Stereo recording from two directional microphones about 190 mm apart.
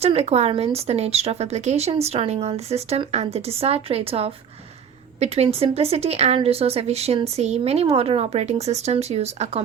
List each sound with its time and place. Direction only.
0.0 s a woman's voice: 35° right (ahead or behind)